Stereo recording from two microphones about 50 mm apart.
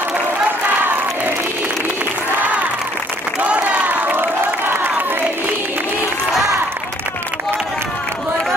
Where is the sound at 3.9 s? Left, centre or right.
Right.